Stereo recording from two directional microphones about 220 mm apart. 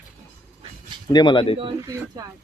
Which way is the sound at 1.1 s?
20° left (ahead or behind).